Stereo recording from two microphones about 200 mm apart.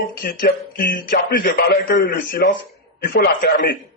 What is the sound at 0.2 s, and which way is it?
A man's voice, 50° left (ahead or behind).